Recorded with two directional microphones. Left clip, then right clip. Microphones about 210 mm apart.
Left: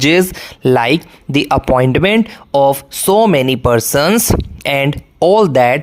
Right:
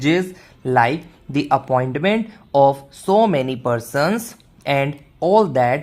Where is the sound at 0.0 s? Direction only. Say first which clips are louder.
Left 8 dB; 35° left (ahead or behind).